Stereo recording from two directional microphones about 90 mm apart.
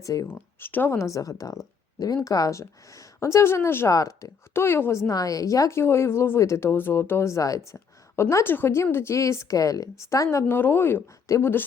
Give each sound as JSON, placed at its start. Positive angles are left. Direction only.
{"t": 0.0, "sound": "speech", "side_deg": 40}
{"t": 0.3, "sound": "speech", "side_deg": 20}
{"t": 3.8, "sound": "a woman's voice", "side_deg": 35}